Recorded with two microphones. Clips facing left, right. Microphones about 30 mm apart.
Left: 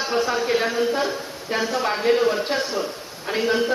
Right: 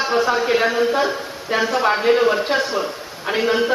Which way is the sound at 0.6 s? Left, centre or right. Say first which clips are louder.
Right 4 dB; right.